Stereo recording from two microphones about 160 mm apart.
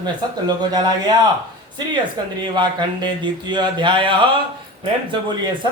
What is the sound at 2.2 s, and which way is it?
A man's voice, 25° right (ahead or behind).